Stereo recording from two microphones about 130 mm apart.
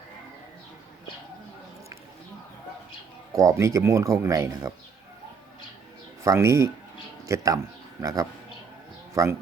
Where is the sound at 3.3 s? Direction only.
25° right (ahead or behind).